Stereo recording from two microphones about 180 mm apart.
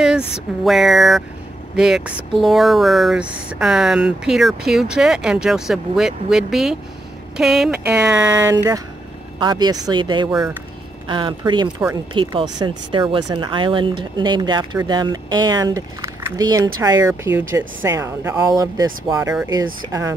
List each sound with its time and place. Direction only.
0.7 s speech: centre (ahead or behind); by 20.2 s 15° right (ahead or behind)